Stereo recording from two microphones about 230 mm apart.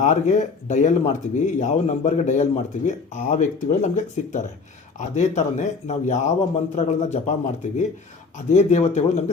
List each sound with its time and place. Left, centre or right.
0.0 s speech: left